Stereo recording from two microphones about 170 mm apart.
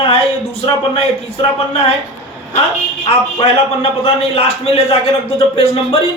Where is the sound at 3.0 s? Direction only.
35° left (ahead or behind).